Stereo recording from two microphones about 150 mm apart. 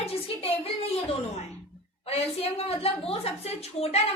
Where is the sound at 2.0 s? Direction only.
40° left (ahead or behind).